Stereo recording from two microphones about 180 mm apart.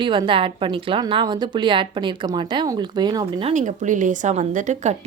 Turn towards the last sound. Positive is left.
turn(degrees=-40)  # may be behind; listen again after turning